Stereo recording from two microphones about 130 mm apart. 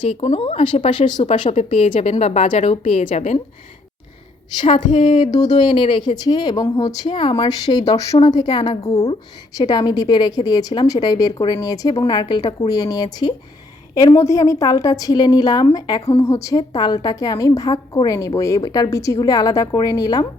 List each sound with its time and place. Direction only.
0.1 s a woman's voice: 50° left (ahead or behind)
1.3 s a woman's voice: 55° left (ahead or behind)
4.7 s a woman's voice: 40° left (ahead or behind)
5.2 s speech: 60° left (ahead or behind)
5.5 s a woman's voice: 40° left (ahead or behind)
7.1 s a woman's voice: 45° left (ahead or behind)
7.9 s speech: 55° left (ahead or behind)
8.3 s a woman's voice: 35° left (ahead or behind); by 9.1 s 50° left (ahead or behind)
9.6 s a woman's voice: 30° left (ahead or behind)
16.0 s a woman's voice: 50° left (ahead or behind)
16.2 s a woman's voice: 25° left (ahead or behind)